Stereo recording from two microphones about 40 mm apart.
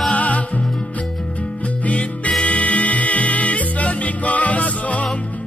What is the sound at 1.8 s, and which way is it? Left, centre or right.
Music, left.